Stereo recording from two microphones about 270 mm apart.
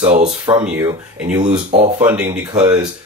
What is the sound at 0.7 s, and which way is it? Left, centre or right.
Speech, centre.